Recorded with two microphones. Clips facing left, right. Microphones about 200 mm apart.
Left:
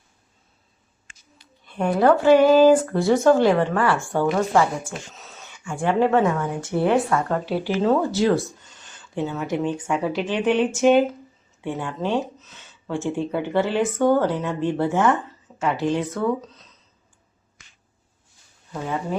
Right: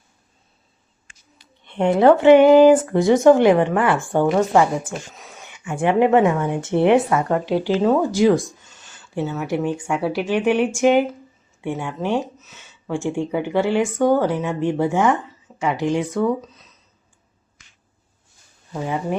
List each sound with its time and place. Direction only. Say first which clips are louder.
1.6 s speech: right 4 dB; 25° right (ahead or behind)